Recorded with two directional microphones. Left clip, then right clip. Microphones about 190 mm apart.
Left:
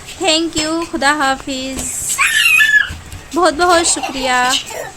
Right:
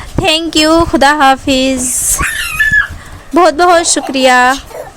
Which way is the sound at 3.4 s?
35° right (ahead or behind).